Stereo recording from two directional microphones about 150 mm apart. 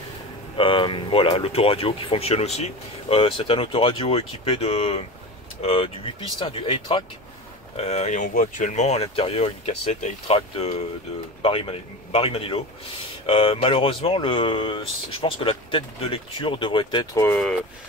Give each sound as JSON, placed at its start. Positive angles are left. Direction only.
{"t": 0.6, "sound": "speech", "side_deg": 35}
{"t": 17.1, "sound": "speech", "side_deg": 20}